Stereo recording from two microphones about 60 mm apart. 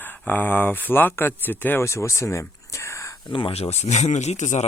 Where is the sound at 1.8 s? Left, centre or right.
Left.